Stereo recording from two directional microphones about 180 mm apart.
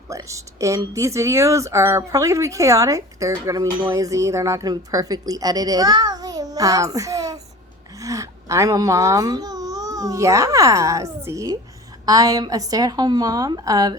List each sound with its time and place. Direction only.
0.1 s a woman's voice: 15° right (ahead or behind)